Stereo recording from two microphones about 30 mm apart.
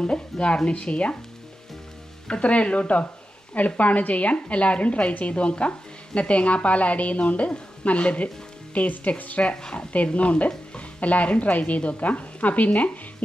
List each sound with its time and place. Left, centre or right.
0.0 s speech: left
2.2 s speech: left
3.5 s speech: left
8.7 s frying: left
9.6 s speech: left
10.0 s speech: left
12.0 s frying: left